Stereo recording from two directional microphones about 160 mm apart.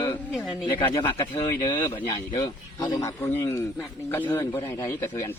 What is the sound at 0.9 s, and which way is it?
A man's voice, 25° left (ahead or behind).